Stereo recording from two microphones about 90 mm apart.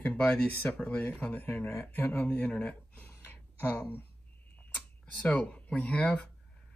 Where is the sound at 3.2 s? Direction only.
20° left (ahead or behind).